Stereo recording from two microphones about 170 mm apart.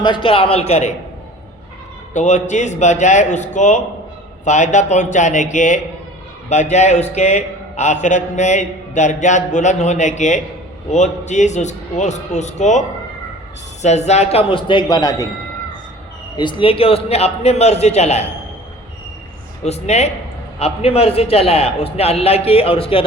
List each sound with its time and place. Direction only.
0.0 s a man's voice: 30° left (ahead or behind)
2.1 s a man's voice: 45° left (ahead or behind)
13.8 s a man's voice: 40° left (ahead or behind); by 15.3 s 20° left (ahead or behind)
16.4 s a man's voice: 30° left (ahead or behind)
19.6 s a man's voice: 40° left (ahead or behind)